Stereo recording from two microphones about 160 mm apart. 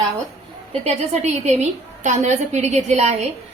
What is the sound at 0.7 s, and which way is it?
A woman's voice, 40° right (ahead or behind).